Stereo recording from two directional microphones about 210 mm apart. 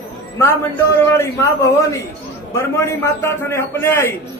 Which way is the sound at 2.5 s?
10° left (ahead or behind).